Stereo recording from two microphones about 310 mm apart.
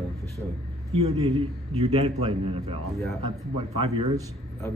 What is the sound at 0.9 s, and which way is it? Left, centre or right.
A man's voice, centre.